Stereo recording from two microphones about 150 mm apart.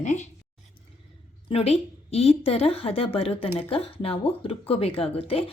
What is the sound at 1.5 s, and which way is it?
Speech, 40° left (ahead or behind).